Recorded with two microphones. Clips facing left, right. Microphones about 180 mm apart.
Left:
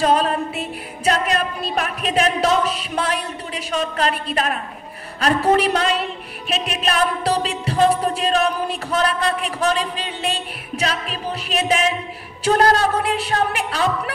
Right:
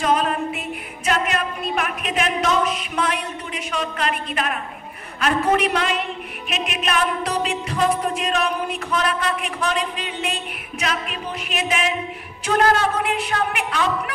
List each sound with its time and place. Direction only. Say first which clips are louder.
0.0 s music: left 2 dB; 35° left (ahead or behind)